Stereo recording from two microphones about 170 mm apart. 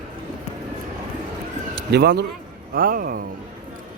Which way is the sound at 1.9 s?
75° right (ahead or behind).